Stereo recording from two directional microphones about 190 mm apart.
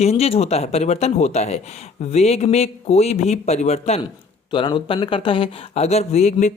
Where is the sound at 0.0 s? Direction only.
30° left (ahead or behind).